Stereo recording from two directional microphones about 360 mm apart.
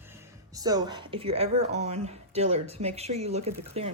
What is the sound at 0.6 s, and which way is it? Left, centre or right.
A woman's voice, centre.